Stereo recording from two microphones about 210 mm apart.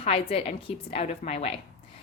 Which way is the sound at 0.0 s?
30° left (ahead or behind).